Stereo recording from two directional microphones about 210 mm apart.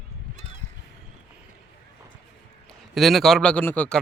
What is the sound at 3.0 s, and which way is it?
Speech, centre (ahead or behind).